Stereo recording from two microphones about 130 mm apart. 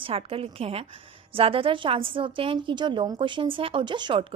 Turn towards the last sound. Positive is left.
turn(degrees=-35)  # may be behind; listen again after turning